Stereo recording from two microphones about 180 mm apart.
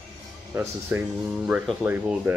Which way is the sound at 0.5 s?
10° right (ahead or behind).